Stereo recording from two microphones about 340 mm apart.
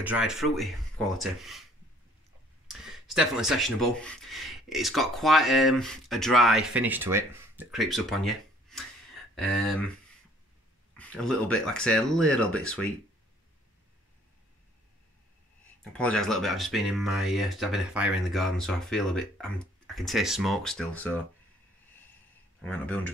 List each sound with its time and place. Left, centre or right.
0.0 s speech: centre
2.7 s speech: centre
11.0 s speech: centre
15.8 s speech: centre
22.6 s speech: centre